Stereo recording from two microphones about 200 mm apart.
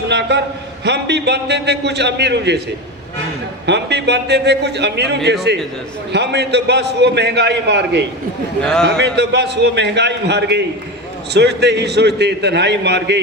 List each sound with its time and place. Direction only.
0.1 s a man's voice: 60° right (ahead or behind)
3.7 s a man's voice: 60° right (ahead or behind)
8.6 s a man's voice: 5° left (ahead or behind)
9.0 s a man's voice: 60° right (ahead or behind)